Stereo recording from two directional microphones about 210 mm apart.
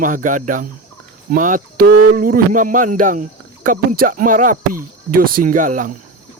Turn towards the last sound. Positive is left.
turn(degrees=-40)  # may be behind; listen again after turning